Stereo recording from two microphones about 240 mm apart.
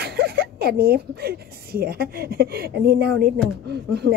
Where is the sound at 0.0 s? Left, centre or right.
Right.